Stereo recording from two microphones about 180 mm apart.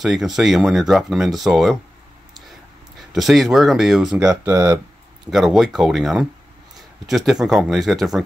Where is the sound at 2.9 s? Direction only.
Centre (ahead or behind).